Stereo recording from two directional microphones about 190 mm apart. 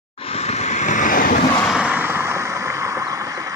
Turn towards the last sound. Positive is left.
turn(degrees=-15)  # may be behind; listen again after turning